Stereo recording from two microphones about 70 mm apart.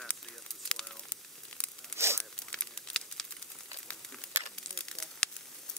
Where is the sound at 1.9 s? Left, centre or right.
Right.